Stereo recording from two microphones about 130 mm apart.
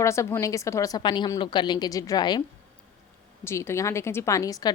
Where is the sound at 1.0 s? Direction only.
35° left (ahead or behind).